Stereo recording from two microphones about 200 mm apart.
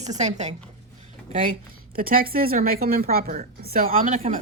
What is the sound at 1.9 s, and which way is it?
A woman's voice, 45° right (ahead or behind).